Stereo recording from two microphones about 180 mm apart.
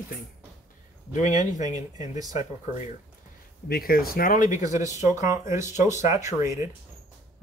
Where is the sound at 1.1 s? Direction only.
45° left (ahead or behind).